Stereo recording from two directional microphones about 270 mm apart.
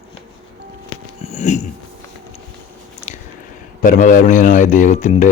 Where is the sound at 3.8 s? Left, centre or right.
Left.